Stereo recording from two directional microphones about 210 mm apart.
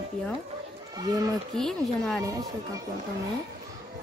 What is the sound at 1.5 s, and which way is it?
Speech, centre (ahead or behind).